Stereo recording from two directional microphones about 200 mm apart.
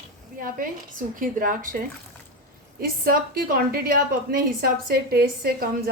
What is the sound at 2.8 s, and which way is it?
A woman's voice, 45° right (ahead or behind).